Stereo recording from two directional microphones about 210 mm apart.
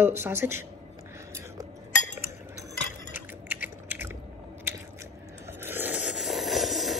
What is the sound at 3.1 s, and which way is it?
Typing, 10° right (ahead or behind).